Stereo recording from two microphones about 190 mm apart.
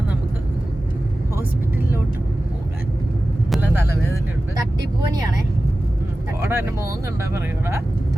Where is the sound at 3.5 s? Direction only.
10° right (ahead or behind).